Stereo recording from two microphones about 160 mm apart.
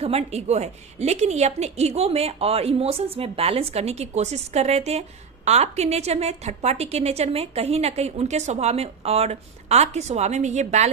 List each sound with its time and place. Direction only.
0.0 s a woman's voice: 40° right (ahead or behind)